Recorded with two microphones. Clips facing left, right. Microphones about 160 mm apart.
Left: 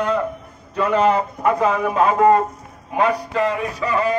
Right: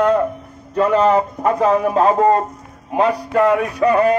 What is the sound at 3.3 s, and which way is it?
Speech, 55° right (ahead or behind).